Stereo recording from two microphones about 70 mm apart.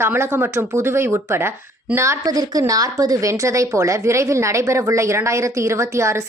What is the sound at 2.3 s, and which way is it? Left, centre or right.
A woman's voice, right.